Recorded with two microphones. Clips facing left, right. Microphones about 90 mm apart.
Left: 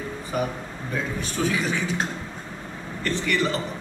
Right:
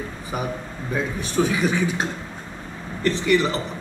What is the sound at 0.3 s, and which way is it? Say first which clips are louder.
A man's voice: even; 15° right (ahead or behind).